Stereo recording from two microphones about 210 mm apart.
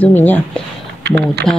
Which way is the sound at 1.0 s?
50° right (ahead or behind).